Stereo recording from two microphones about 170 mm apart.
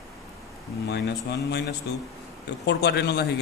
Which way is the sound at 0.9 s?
75° left (ahead or behind).